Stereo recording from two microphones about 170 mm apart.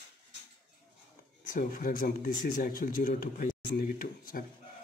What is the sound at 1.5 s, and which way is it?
A man's voice, 55° left (ahead or behind).